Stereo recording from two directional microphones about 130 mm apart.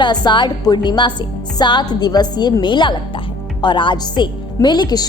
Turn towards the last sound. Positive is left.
turn(degrees=30)  # may be behind; listen again after turning